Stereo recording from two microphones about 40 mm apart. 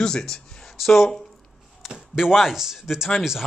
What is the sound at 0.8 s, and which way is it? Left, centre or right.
Speech, centre.